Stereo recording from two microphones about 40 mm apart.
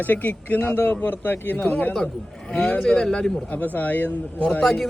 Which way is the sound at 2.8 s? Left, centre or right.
Centre.